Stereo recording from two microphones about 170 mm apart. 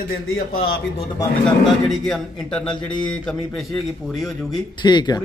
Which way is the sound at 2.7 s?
25° left (ahead or behind).